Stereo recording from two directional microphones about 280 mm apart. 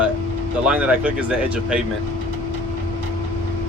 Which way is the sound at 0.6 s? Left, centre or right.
Centre.